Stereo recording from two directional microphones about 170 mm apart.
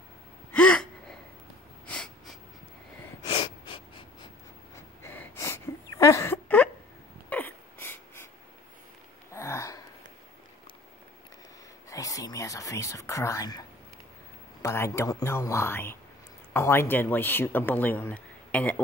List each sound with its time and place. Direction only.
0.5 s gasp: 5° left (ahead or behind)
1.9 s snort: 5° left (ahead or behind)
3.3 s gasp: 30° left (ahead or behind)
5.0 s a sound: 10° left (ahead or behind)
9.3 s a sound: 15° left (ahead or behind)
11.9 s whispering: 20° left (ahead or behind)
14.6 s speech: 15° left (ahead or behind)